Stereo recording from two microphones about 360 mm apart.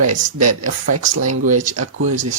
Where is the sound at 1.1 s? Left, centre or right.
Right.